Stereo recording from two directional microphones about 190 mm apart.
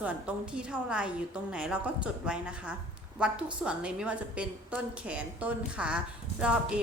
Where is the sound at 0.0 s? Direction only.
5° right (ahead or behind).